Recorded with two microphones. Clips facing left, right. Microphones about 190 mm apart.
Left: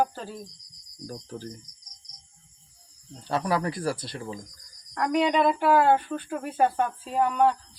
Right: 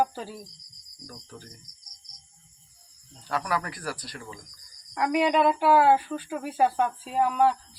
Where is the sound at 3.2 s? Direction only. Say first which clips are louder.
Left 3 dB; 25° left (ahead or behind).